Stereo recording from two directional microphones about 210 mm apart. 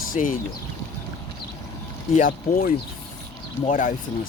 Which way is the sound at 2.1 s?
40° left (ahead or behind).